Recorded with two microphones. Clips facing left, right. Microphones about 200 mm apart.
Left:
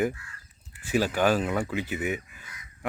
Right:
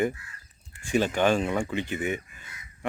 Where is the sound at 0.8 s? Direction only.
5° left (ahead or behind).